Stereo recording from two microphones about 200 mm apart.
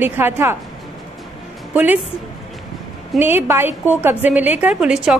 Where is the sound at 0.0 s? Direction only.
10° right (ahead or behind).